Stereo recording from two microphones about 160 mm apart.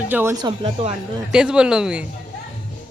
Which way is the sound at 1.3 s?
5° right (ahead or behind).